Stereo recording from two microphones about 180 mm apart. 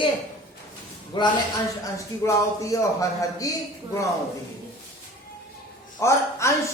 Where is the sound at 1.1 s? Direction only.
25° left (ahead or behind).